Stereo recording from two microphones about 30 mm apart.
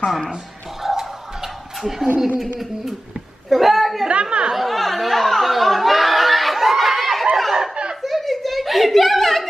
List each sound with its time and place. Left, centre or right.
0.8 s a sound: centre
2.1 s a man's voice: centre
3.4 s a woman's voice: centre
4.1 s speech: right
4.6 s chatter: centre
8.0 s a sound: centre